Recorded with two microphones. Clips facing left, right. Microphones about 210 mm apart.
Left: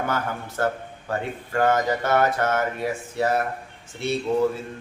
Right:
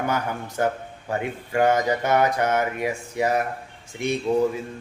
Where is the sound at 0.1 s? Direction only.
15° right (ahead or behind).